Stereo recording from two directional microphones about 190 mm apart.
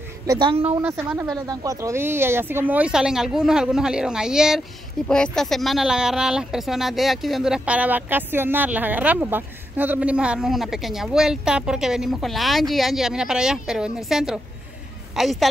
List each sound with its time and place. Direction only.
0.3 s speech: 25° right (ahead or behind)
1.3 s speech: 20° right (ahead or behind); by 15.4 s centre (ahead or behind)